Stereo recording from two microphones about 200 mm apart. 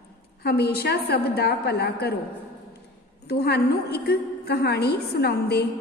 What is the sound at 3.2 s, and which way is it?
A woman's voice, 55° left (ahead or behind).